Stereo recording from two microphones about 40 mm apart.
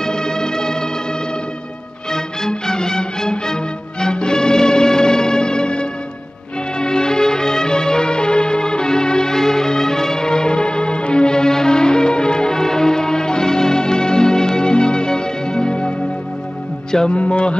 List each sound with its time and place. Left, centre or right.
0.0 s music: centre
2.0 s music: centre
17.1 s music: left